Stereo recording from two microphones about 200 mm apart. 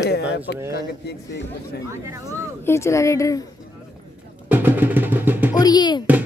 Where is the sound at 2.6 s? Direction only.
15° left (ahead or behind).